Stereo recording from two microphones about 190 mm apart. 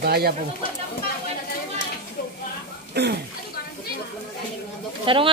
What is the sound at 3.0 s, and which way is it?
Speech, 60° right (ahead or behind).